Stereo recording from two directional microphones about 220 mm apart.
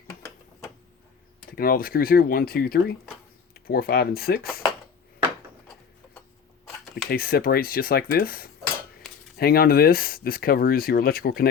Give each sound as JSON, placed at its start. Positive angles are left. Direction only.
{"t": 1.5, "sound": "speech", "side_deg": 40}
{"t": 7.1, "sound": "speech", "side_deg": 45}